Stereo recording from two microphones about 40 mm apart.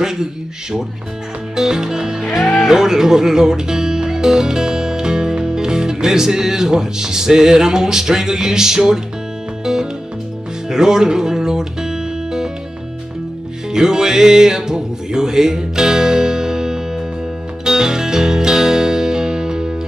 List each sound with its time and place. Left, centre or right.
0.0 s speech: centre
9.7 s music: centre
13.7 s music: centre